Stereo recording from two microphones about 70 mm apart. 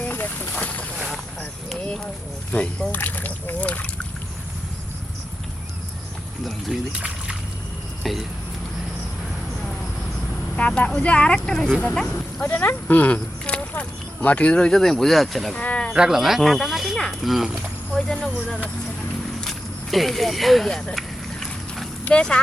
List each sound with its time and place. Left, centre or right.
0.1 s boat: left
0.9 s boat: centre
2.5 s speech: centre
2.9 s speech: left
6.7 s speech: centre
8.0 s speech: centre
10.5 s speech: centre
12.1 s speech: left
14.7 s speech: centre
15.5 s snake: centre
15.9 s speech: centre
19.4 s speech: centre
22.0 s speech: centre